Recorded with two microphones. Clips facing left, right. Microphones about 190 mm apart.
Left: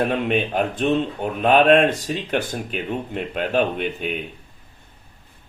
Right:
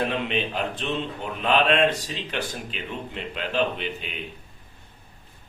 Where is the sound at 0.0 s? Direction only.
50° left (ahead or behind).